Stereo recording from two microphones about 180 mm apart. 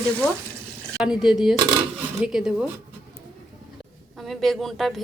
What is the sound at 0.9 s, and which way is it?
A woman's voice, 5° right (ahead or behind).